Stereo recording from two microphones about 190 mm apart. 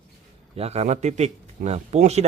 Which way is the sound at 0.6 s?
35° right (ahead or behind).